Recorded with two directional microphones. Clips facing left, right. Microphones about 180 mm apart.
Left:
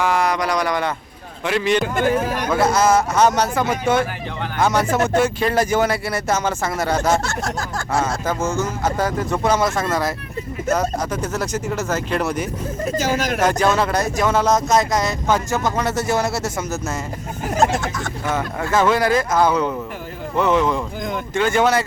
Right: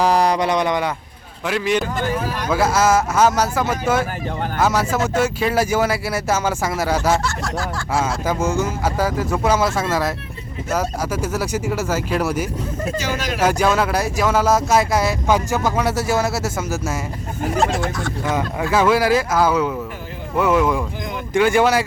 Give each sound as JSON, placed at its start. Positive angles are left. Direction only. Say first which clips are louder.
{"t": 0.0, "sound": "speech", "louder": "right 3 dB", "side_deg": -35}
{"t": 1.5, "sound": "speech", "louder": "left 1 dB", "side_deg": -5}
{"t": 7.2, "sound": "speech", "louder": "even", "side_deg": 45}
{"t": 8.3, "sound": "speech", "louder": "right 1 dB", "side_deg": -10}
{"t": 13.0, "sound": "speech", "louder": "left 7 dB", "side_deg": 45}
{"t": 13.4, "sound": "speech", "louder": "right 2 dB", "side_deg": -10}
{"t": 17.6, "sound": "speech", "louder": "left 2 dB", "side_deg": 45}
{"t": 18.3, "sound": "speech", "louder": "right 1 dB", "side_deg": -15}